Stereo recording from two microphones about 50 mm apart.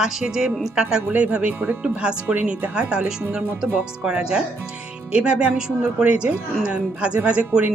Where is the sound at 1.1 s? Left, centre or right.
Right.